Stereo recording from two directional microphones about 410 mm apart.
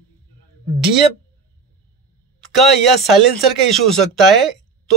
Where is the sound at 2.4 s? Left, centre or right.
Centre.